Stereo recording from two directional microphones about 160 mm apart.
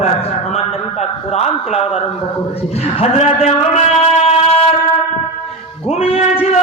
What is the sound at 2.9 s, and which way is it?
Speech, 40° left (ahead or behind).